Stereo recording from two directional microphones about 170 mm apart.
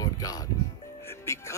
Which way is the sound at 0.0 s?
20° left (ahead or behind).